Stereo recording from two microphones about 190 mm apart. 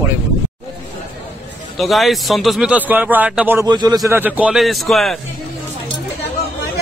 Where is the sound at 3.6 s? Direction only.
20° right (ahead or behind).